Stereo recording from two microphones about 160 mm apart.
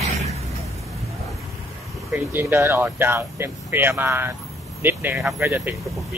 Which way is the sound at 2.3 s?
15° right (ahead or behind).